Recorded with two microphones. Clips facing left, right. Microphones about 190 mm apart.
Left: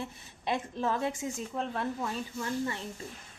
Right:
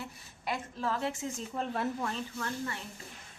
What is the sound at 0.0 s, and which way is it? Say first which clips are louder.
A woman's voice: left 3 dB; 20° left (ahead or behind).